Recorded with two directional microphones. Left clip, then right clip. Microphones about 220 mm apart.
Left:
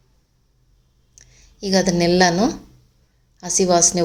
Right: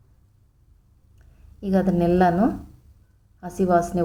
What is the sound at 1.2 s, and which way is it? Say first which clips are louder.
A woman's voice: left 8 dB; 15° left (ahead or behind).